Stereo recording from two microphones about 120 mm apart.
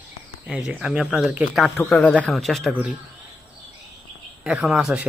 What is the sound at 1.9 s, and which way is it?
Speech, 10° left (ahead or behind).